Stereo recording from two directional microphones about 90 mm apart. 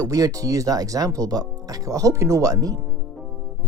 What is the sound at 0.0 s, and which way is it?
Speech, 40° right (ahead or behind).